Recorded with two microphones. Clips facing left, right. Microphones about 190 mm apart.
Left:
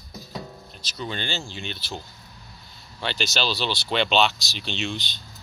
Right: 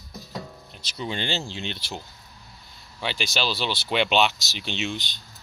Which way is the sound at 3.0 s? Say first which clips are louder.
Left 1 dB; 10° right (ahead or behind).